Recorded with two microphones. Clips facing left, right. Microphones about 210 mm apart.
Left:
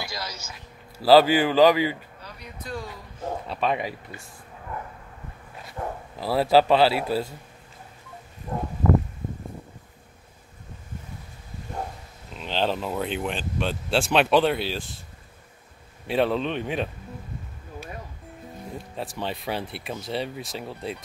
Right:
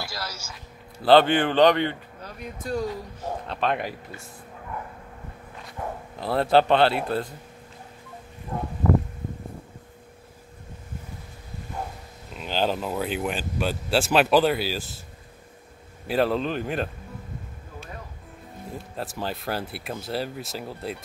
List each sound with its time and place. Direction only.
0.0 s a sound: 5° right (ahead or behind)
0.9 s speech: 5° left (ahead or behind)
2.2 s speech: 45° right (ahead or behind)
3.4 s speech: centre (ahead or behind)
6.1 s speech: 5° left (ahead or behind)
12.4 s speech: 5° right (ahead or behind)
16.1 s speech: centre (ahead or behind)
18.7 s speech: centre (ahead or behind)